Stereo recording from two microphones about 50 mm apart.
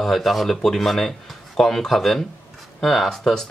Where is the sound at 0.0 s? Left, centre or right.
Centre.